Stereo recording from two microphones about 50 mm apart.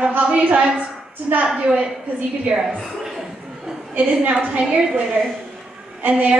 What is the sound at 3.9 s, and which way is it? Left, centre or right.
A woman's voice, right.